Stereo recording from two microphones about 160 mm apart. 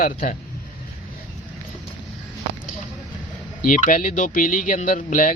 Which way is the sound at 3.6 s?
55° left (ahead or behind).